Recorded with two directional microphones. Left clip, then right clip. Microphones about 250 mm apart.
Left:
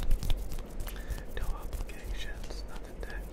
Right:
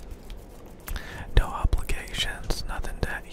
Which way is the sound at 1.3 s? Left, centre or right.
Right.